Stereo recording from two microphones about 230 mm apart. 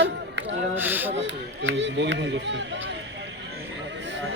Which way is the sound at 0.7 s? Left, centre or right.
Centre.